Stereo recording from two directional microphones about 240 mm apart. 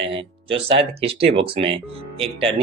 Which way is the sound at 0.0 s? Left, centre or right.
Right.